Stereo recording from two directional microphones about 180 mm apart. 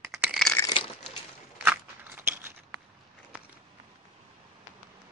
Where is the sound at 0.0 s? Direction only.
15° right (ahead or behind).